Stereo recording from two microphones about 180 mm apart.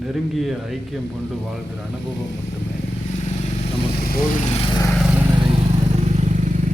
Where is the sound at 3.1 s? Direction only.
40° left (ahead or behind).